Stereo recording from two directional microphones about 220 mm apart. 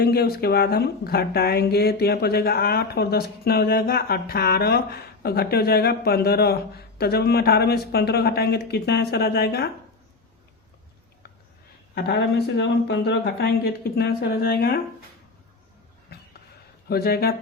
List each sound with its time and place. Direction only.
0.0 s speech: 45° left (ahead or behind)
11.9 s speech: 50° left (ahead or behind)
16.1 s a sound: 45° left (ahead or behind)
16.9 s speech: 45° left (ahead or behind)